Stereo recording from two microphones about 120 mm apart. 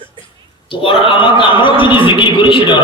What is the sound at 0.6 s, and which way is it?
A man's voice, 45° left (ahead or behind).